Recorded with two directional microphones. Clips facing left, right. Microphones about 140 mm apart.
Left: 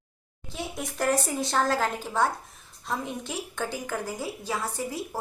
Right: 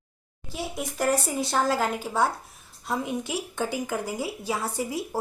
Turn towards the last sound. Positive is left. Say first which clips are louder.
# right 3 dB
turn(degrees=-10)  # may be behind; listen again after turning